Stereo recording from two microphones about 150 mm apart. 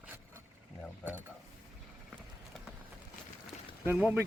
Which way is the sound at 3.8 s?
10° right (ahead or behind).